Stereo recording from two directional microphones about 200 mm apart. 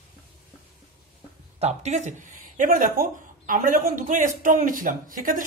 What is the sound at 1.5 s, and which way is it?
Speech, 35° right (ahead or behind).